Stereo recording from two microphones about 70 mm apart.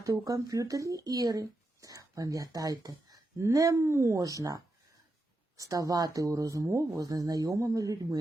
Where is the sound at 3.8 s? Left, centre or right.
Right.